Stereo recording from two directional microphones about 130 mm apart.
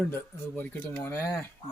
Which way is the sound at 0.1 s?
15° left (ahead or behind).